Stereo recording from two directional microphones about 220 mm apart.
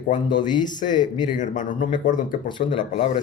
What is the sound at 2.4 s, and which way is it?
Speech, 25° left (ahead or behind).